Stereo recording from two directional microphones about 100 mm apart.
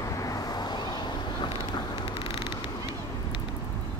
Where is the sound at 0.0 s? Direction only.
35° left (ahead or behind); by 2.3 s 60° left (ahead or behind).